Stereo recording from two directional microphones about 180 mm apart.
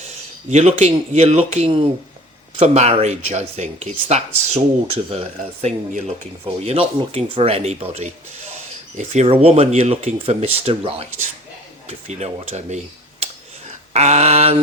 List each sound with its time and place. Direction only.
0.5 s speech: 40° right (ahead or behind)
5.6 s speech: 40° right (ahead or behind)